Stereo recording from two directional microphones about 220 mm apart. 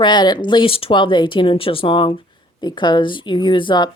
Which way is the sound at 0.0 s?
20° left (ahead or behind).